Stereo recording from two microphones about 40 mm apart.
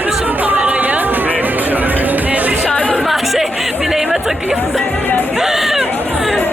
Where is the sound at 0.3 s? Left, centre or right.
Right.